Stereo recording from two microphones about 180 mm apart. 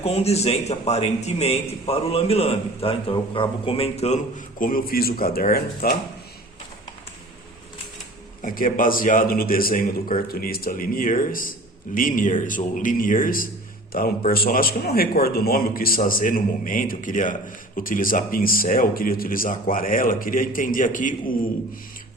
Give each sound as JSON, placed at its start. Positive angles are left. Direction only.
{"t": 0.0, "sound": "a man's voice", "side_deg": 35}
{"t": 8.4, "sound": "a man's voice", "side_deg": 50}